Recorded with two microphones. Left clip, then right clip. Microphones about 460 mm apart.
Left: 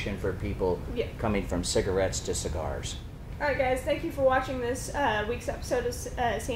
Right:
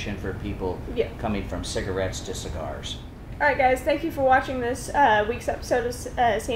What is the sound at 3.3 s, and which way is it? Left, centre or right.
A woman's voice, centre.